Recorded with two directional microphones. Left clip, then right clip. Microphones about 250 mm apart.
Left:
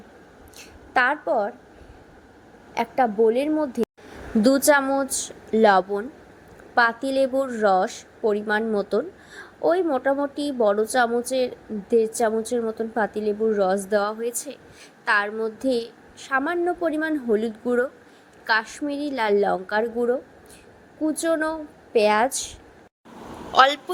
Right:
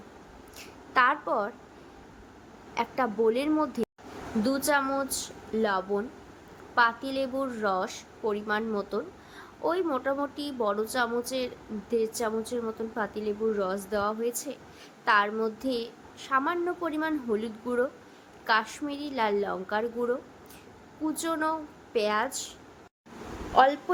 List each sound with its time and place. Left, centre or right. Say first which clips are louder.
0.6 s a woman's voice: left 3 dB; centre
2.7 s a woman's voice: left 7 dB; centre
4.4 s a woman's voice: left 9 dB; left
23.6 s speech: left 5 dB; left